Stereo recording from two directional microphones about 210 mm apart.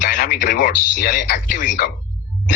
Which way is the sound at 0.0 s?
40° left (ahead or behind).